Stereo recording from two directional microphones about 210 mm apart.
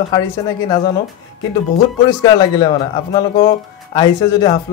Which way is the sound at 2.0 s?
20° left (ahead or behind).